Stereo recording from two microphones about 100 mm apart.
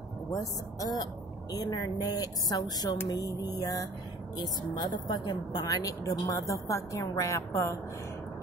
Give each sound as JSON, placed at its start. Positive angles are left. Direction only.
{"t": 0.3, "sound": "a woman's voice", "side_deg": 35}